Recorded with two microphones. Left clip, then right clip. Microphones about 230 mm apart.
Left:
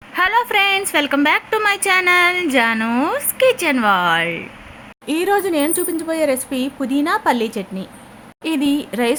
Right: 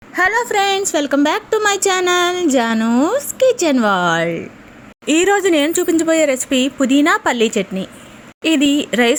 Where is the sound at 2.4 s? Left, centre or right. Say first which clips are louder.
Right 1 dB; right.